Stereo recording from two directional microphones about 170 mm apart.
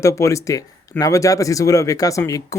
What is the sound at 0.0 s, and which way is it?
Speech, 15° left (ahead or behind).